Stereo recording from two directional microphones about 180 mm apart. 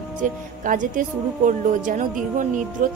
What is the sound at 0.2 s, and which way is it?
Speech, 45° right (ahead or behind).